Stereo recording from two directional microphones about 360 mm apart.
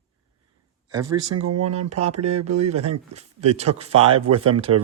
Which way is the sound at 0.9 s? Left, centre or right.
Centre.